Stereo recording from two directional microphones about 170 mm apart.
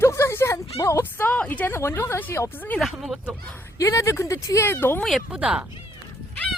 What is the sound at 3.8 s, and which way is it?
A woman's voice, 15° left (ahead or behind).